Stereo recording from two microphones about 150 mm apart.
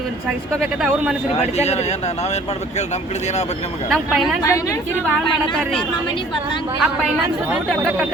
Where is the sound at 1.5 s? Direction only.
45° left (ahead or behind).